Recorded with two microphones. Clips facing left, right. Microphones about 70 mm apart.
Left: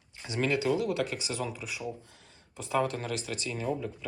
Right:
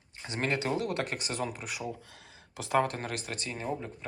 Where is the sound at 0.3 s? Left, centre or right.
Right.